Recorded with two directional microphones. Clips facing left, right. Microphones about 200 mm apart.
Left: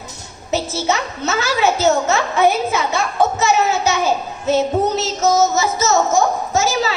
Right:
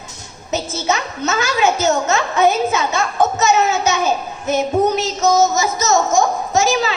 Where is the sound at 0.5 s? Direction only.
20° right (ahead or behind).